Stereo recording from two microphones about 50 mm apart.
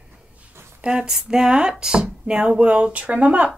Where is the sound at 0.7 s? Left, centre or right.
Centre.